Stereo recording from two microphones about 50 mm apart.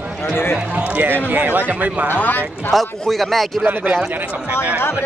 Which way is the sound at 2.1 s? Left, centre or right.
Left.